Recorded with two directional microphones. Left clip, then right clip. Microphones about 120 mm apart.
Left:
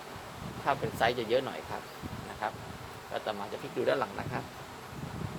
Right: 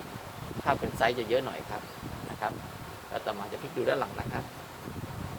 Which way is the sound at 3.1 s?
20° left (ahead or behind).